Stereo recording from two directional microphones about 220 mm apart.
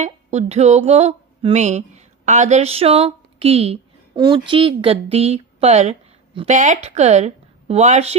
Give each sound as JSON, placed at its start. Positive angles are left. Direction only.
{"t": 0.0, "sound": "speech", "side_deg": -30}